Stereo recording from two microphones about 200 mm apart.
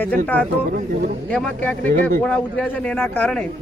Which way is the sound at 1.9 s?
45° right (ahead or behind).